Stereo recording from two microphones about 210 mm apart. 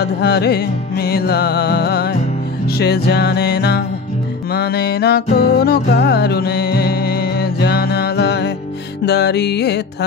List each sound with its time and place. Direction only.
0.0 s music: 50° left (ahead or behind)